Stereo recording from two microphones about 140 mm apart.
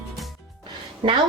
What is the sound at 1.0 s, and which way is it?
Speech, 35° right (ahead or behind).